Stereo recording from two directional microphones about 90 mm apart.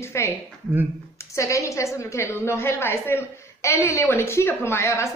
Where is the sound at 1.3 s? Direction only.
35° left (ahead or behind).